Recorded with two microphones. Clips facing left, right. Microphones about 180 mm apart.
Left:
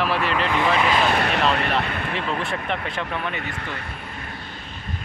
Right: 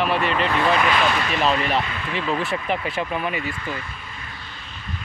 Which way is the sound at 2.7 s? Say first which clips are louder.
Right 3 dB; 10° right (ahead or behind).